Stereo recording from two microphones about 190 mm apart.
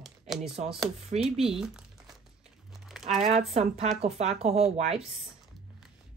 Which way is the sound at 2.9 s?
Centre (ahead or behind).